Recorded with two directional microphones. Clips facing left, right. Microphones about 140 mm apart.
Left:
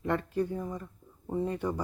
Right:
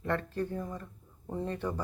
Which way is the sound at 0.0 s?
10° left (ahead or behind).